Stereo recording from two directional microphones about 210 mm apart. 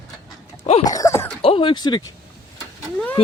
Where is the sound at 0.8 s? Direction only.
15° left (ahead or behind).